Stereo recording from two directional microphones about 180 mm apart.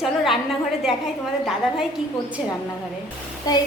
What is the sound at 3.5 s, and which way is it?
Child singing, 20° left (ahead or behind).